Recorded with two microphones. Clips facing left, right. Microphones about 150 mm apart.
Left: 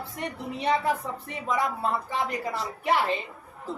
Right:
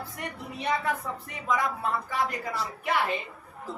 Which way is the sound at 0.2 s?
30° left (ahead or behind).